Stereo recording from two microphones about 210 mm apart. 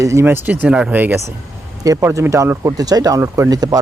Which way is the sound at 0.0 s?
15° right (ahead or behind).